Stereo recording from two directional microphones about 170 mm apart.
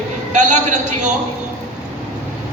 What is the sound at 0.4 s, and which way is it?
Speech, 45° right (ahead or behind).